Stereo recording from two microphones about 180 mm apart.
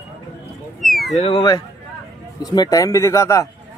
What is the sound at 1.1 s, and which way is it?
A man's voice, 30° left (ahead or behind).